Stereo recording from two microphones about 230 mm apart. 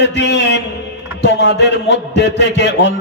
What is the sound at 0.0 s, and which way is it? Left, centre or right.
A man's voice, left.